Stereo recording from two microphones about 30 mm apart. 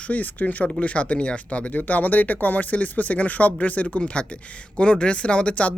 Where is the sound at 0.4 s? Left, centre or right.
Left.